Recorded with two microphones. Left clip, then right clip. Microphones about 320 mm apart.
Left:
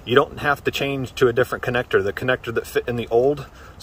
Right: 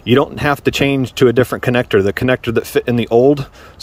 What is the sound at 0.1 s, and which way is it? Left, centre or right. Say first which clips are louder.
Speech: right 4 dB; right.